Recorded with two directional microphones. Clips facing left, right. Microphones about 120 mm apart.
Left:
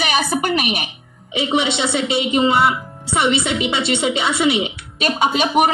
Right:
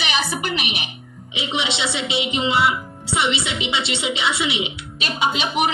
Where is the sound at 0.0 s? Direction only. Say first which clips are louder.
Left 5 dB; 50° left (ahead or behind).